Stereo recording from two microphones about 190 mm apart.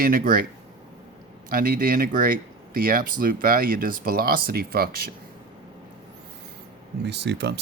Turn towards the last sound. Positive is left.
turn(degrees=-65)  # may be behind; listen again after turning